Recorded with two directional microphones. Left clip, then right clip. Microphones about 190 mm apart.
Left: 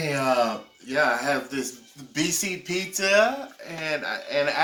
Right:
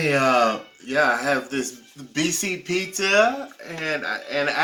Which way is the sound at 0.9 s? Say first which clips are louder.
Right 3 dB; 15° left (ahead or behind).